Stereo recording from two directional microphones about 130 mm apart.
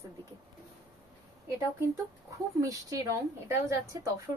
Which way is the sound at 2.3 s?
25° right (ahead or behind).